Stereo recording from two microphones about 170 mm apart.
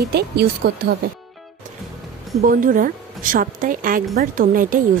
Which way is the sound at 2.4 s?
55° right (ahead or behind).